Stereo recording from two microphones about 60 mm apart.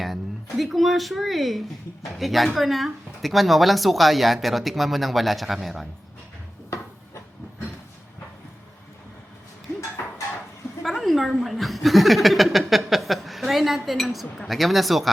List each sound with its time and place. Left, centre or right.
0.0 s speech: centre
10.8 s a woman's voice: centre